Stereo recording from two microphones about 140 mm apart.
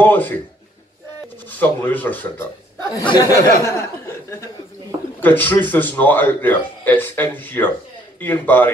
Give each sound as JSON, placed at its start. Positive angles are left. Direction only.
{"t": 0.0, "sound": "speech", "side_deg": 15}
{"t": 1.6, "sound": "speech", "side_deg": 15}